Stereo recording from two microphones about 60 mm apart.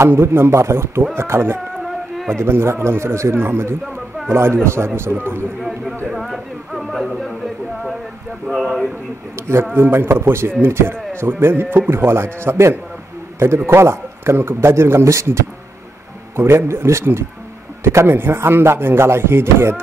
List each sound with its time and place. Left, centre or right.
0.0 s chopping: right
1.1 s a man's voice: right
1.8 s a sound: centre
2.4 s chopping: right
5.1 s a man's voice: right
5.6 s speech: centre
9.8 s chopping: right
10.6 s a man's voice: right
13.7 s chopping: right